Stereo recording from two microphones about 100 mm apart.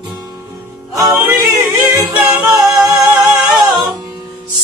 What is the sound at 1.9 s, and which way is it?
A capella, 10° right (ahead or behind).